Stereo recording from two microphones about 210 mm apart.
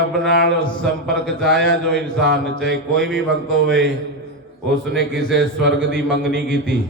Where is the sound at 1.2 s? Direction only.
Centre (ahead or behind).